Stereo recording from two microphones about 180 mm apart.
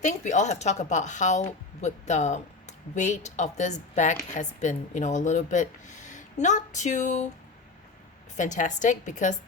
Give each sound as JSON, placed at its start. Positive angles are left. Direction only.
{"t": 0.0, "sound": "a woman's voice", "side_deg": 40}
{"t": 8.4, "sound": "a woman's voice", "side_deg": 45}